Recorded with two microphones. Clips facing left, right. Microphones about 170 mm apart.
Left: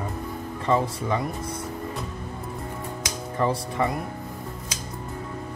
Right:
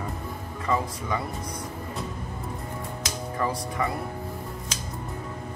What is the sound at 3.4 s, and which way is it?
Speech, 25° left (ahead or behind).